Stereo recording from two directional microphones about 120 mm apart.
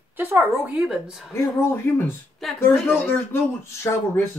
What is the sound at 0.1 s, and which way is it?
A woman's voice, 20° right (ahead or behind).